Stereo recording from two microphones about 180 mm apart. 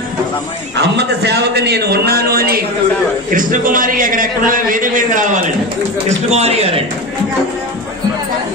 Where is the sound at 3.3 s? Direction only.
45° right (ahead or behind).